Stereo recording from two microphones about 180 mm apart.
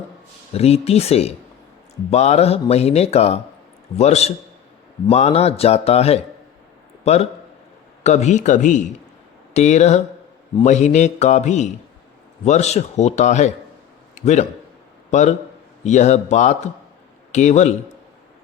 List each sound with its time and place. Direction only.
0.5 s a man's voice: 35° left (ahead or behind)